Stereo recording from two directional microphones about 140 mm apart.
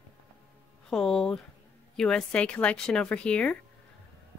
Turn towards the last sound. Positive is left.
turn(degrees=10)  # may be behind; listen again after turning